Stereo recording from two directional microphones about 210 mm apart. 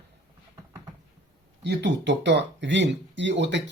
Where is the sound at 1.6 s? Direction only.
55° right (ahead or behind).